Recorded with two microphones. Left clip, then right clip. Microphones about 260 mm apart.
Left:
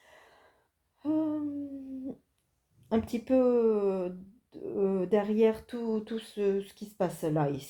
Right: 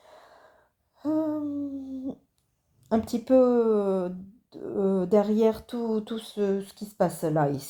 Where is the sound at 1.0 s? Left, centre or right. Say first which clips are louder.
Right 3 dB; right.